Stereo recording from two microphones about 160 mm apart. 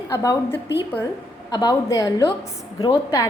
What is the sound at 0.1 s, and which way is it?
A woman's voice, 20° left (ahead or behind).